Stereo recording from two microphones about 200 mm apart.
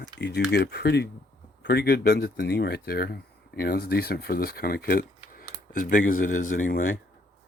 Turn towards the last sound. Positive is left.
turn(degrees=45)  # may be behind; listen again after turning